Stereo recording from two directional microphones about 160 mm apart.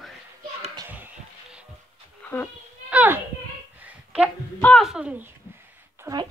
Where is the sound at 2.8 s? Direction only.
10° right (ahead or behind).